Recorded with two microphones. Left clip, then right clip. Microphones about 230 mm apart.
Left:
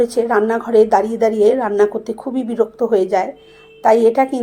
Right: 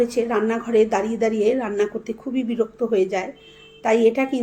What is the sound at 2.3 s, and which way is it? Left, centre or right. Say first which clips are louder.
Speech: left 2 dB; left.